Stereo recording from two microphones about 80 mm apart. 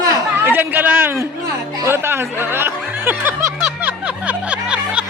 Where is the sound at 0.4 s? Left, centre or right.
Right.